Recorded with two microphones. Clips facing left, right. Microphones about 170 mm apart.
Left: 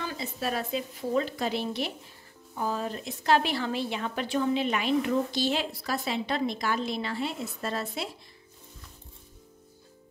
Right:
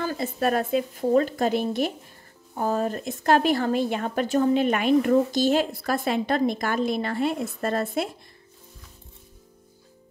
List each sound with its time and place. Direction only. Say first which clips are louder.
0.0 s speech: right 8 dB; 45° right (ahead or behind)